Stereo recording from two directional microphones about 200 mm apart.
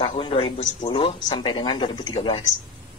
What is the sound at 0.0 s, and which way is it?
Speech, 25° left (ahead or behind).